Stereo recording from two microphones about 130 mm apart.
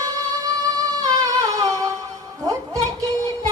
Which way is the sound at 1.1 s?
30° right (ahead or behind).